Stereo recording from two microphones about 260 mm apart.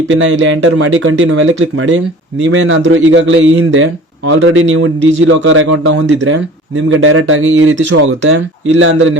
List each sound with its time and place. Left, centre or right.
0.1 s speech: right